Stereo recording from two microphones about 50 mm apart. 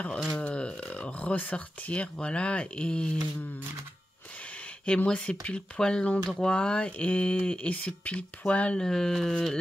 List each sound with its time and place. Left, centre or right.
0.3 s burping: left
1.2 s speech: left
4.8 s speech: left
8.7 s a sound: centre